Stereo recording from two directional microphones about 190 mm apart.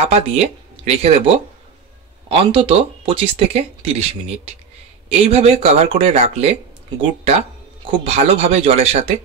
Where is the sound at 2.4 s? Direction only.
30° right (ahead or behind).